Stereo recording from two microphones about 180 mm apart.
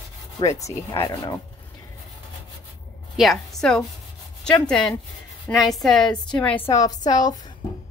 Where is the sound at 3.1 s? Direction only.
Centre (ahead or behind).